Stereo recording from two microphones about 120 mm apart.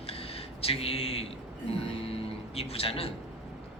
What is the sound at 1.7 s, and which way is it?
Speech, 55° left (ahead or behind).